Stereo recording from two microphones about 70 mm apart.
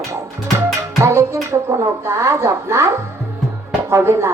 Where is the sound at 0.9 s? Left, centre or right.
Right.